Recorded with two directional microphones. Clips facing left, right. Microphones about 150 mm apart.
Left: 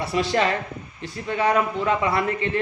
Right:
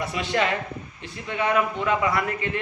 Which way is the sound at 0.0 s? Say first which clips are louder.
Left 3 dB; 35° left (ahead or behind).